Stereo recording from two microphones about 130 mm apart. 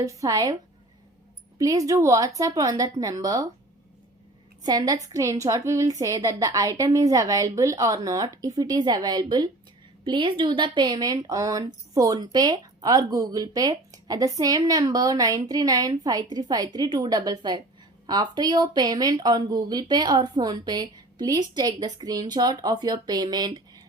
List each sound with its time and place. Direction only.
0.0 s speech: 25° right (ahead or behind)
1.5 s speech: 25° right (ahead or behind)
4.6 s speech: 30° right (ahead or behind)